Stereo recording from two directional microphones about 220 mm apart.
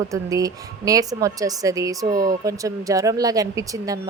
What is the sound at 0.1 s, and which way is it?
Speech, 15° right (ahead or behind).